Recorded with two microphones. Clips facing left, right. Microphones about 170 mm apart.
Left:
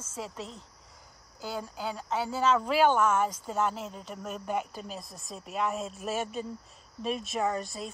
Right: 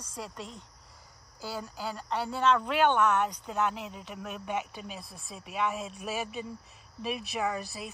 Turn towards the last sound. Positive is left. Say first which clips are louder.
# left 2 dB
turn(degrees=-5)  # may be behind; listen again after turning